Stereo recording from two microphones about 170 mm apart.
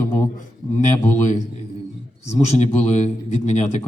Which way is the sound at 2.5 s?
40° left (ahead or behind).